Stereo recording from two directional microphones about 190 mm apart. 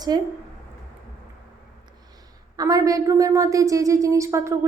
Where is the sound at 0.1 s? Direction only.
20° right (ahead or behind).